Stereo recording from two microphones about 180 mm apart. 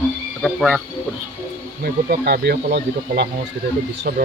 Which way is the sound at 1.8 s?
60° right (ahead or behind).